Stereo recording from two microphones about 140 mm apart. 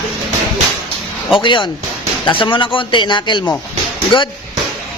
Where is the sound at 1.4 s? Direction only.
35° left (ahead or behind).